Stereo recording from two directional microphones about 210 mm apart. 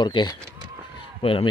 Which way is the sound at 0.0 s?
20° left (ahead or behind).